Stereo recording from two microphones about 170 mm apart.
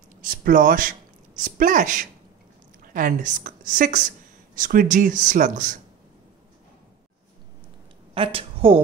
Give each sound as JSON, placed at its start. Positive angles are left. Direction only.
{"t": 0.2, "sound": "a woman's voice", "side_deg": -55}
{"t": 8.1, "sound": "a woman's voice", "side_deg": -35}